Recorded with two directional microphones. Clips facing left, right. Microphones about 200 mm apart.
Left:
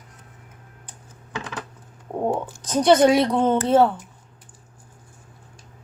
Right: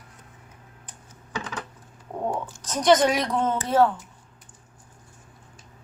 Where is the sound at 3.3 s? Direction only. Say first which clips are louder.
Left 4 dB; 25° left (ahead or behind).